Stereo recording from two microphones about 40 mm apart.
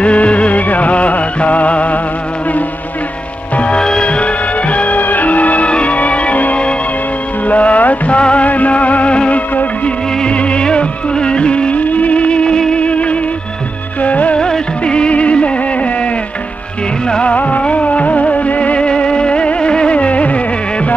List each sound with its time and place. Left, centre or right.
0.0 s music: left
3.5 s music: left
5.7 s music: left
8.2 s music of bollywood: left
12.7 s music: left
14.0 s music of bollywood: left
14.4 s music of bollywood: left
17.2 s music: left